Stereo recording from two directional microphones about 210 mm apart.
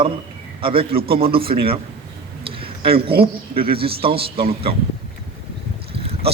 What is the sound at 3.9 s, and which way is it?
Speech, 45° right (ahead or behind).